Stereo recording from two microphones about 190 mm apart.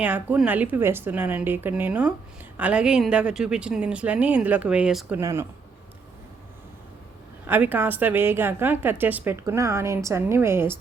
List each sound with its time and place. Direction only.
0.0 s a woman's voice: 10° right (ahead or behind)
7.4 s a woman's voice: 10° right (ahead or behind)